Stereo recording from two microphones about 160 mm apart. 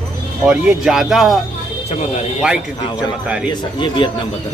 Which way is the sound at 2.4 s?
5° right (ahead or behind).